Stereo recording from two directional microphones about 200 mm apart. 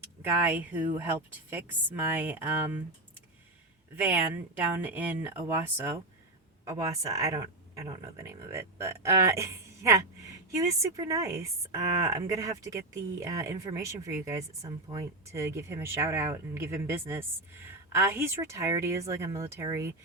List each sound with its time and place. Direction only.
0.2 s speech: 10° right (ahead or behind)
3.9 s speech: 10° right (ahead or behind)